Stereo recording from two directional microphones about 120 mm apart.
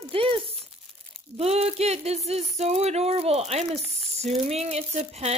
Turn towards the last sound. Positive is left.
turn(degrees=-60)  # may be behind; listen again after turning